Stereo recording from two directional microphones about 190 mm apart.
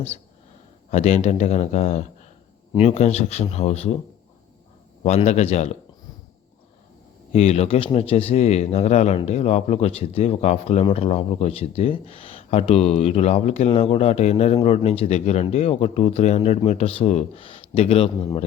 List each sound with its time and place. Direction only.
0.9 s speech: 35° left (ahead or behind)
5.0 s speech: 35° left (ahead or behind)
7.3 s speech: 35° left (ahead or behind)